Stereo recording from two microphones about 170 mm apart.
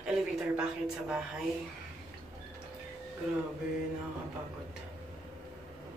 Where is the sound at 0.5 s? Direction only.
5° right (ahead or behind).